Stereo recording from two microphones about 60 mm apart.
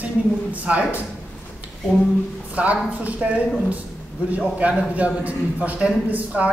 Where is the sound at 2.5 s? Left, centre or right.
Right.